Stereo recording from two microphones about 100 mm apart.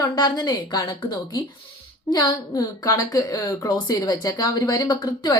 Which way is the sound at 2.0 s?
40° left (ahead or behind).